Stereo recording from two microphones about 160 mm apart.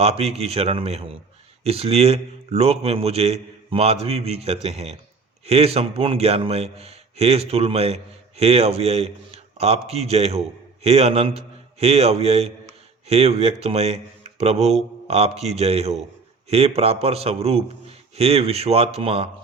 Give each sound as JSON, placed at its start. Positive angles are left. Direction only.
{"t": 0.0, "sound": "a man's voice", "side_deg": -40}